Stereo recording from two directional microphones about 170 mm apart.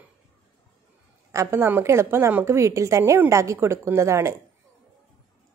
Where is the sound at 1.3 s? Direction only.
15° right (ahead or behind).